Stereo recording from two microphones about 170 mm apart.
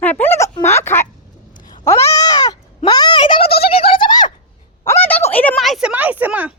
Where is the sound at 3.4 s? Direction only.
65° left (ahead or behind).